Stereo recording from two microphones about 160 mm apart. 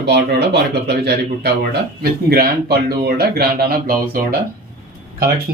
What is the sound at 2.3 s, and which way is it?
A man's voice, 75° right (ahead or behind).